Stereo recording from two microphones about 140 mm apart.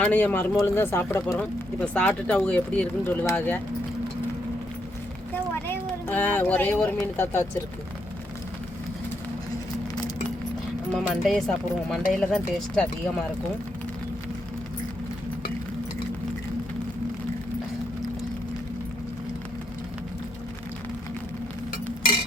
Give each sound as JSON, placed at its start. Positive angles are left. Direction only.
{"t": 0.0, "sound": "speech", "side_deg": 10}
{"t": 5.3, "sound": "speech", "side_deg": 15}
{"t": 11.1, "sound": "speech", "side_deg": 0}